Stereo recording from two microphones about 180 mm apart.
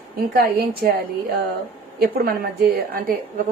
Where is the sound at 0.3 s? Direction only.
55° right (ahead or behind).